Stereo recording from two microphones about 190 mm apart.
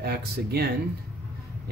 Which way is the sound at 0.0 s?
55° right (ahead or behind).